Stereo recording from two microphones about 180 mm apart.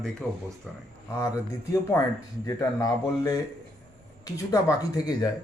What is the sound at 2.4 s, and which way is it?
Speech, 20° left (ahead or behind).